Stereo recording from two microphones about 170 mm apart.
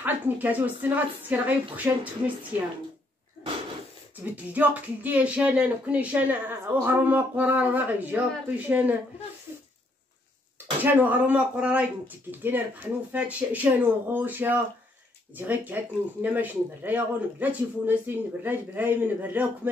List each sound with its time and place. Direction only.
0.0 s speech: 10° right (ahead or behind)
4.2 s speech: 10° right (ahead or behind)
10.8 s speech: 10° right (ahead or behind)